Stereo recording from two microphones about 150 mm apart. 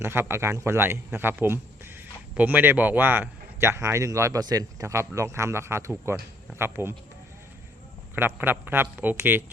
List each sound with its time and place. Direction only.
0.0 s a man's voice: 15° right (ahead or behind)
8.1 s a man's voice: 15° right (ahead or behind)